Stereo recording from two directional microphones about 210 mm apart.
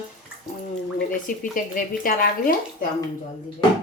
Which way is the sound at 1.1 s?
40° left (ahead or behind).